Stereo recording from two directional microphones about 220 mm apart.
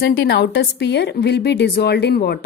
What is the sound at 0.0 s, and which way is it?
A woman's voice, 45° left (ahead or behind).